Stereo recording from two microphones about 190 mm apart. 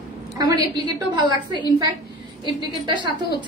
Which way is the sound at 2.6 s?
25° right (ahead or behind).